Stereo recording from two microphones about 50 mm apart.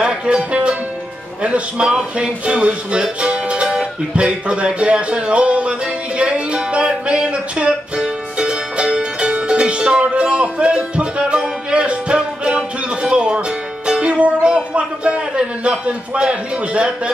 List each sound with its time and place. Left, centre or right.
0.0 s music: centre